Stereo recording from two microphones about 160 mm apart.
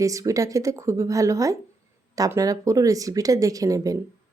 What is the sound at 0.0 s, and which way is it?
A woman's voice, 20° right (ahead or behind).